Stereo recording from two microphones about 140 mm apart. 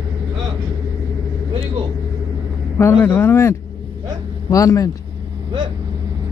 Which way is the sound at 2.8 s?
15° left (ahead or behind).